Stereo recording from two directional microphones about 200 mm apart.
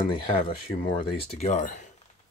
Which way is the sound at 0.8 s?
35° left (ahead or behind).